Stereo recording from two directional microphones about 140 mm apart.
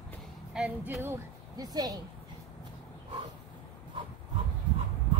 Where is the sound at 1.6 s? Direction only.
30° right (ahead or behind).